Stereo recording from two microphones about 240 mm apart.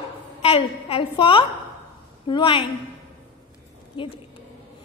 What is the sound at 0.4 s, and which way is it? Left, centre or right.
A woman's voice, left.